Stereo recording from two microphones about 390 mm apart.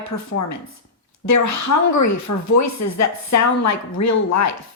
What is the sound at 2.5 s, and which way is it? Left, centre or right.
Speech, left.